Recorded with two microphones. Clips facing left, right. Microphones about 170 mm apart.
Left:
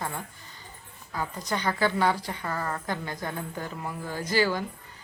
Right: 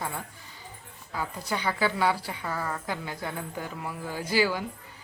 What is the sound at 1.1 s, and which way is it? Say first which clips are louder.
Speech: left 1 dB; 10° right (ahead or behind).